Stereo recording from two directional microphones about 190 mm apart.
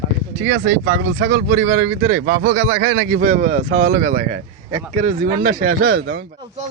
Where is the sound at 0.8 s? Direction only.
60° right (ahead or behind).